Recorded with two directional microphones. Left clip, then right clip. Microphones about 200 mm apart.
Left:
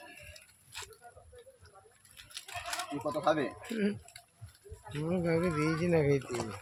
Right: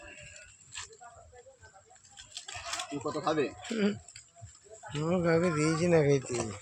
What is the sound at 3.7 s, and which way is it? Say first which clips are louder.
Speech: right 3 dB; 10° right (ahead or behind).